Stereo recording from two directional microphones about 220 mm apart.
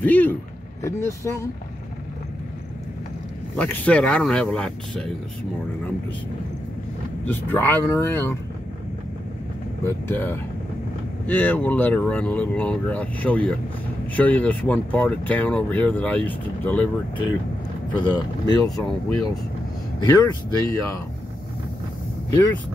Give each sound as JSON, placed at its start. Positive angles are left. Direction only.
{"t": 0.0, "sound": "speech", "side_deg": 5}
{"t": 3.5, "sound": "speech", "side_deg": 5}
{"t": 7.2, "sound": "speech", "side_deg": 10}
{"t": 9.8, "sound": "speech", "side_deg": 10}
{"t": 18.0, "sound": "speech", "side_deg": 20}
{"t": 18.8, "sound": "speech", "side_deg": 5}
{"t": 20.0, "sound": "speech", "side_deg": 15}